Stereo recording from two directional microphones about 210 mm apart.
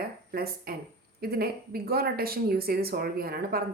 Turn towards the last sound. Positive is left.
turn(degrees=-45)  # may be behind; listen again after turning